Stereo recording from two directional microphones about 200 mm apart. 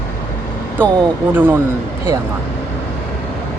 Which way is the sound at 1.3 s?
10° right (ahead or behind).